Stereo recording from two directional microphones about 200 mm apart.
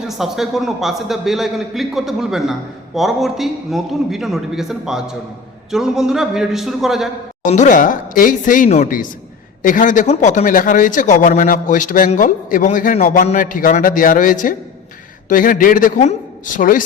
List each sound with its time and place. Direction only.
0.0 s a man's voice: centre (ahead or behind)
7.4 s a man's voice: 35° left (ahead or behind)